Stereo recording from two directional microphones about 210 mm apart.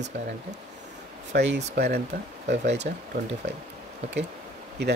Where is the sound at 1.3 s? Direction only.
55° right (ahead or behind).